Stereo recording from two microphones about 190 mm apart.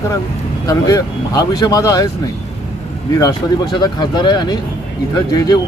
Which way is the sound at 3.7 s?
25° left (ahead or behind).